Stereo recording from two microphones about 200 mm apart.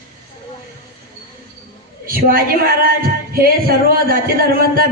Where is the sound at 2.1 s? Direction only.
45° right (ahead or behind).